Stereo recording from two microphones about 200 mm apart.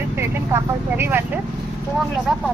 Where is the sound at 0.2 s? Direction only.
10° right (ahead or behind).